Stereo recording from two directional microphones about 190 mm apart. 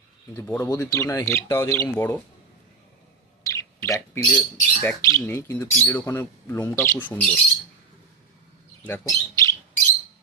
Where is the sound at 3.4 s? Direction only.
15° left (ahead or behind).